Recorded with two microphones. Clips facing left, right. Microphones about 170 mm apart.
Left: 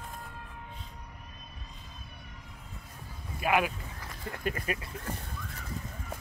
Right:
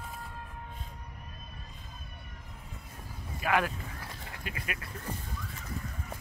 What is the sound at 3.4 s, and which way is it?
Speech, 15° left (ahead or behind).